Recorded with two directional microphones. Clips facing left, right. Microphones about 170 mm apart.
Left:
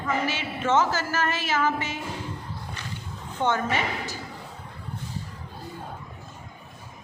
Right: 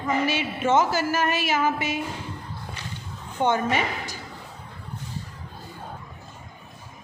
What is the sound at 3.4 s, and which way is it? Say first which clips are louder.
Speech: right 2 dB; 15° right (ahead or behind).